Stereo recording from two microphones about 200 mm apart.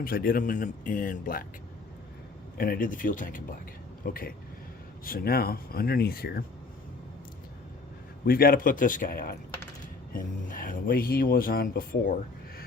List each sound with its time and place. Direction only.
0.0 s speech: 45° left (ahead or behind)
2.6 s speech: 45° left (ahead or behind)
8.2 s speech: 50° left (ahead or behind)